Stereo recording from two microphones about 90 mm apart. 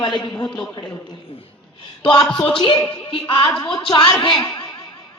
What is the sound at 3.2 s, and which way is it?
A woman's voice, 55° left (ahead or behind).